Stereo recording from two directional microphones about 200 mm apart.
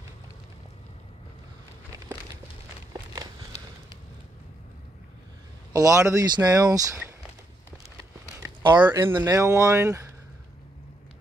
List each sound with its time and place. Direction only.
5.7 s speech: 15° right (ahead or behind)
8.4 s speech: 10° right (ahead or behind)